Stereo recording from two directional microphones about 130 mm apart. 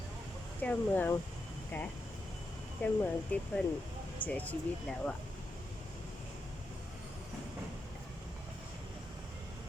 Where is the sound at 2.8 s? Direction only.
15° left (ahead or behind).